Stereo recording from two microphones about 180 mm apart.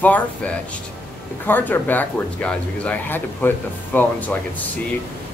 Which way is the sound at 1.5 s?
10° left (ahead or behind).